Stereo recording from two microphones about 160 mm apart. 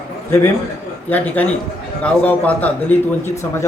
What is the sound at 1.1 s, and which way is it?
A man's voice, 10° left (ahead or behind).